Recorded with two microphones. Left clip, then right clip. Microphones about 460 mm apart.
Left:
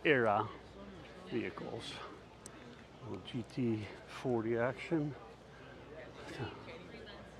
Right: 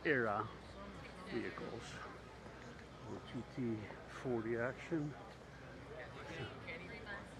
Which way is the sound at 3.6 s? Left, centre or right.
Left.